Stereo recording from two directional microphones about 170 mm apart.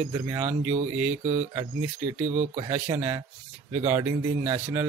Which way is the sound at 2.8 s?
15° right (ahead or behind).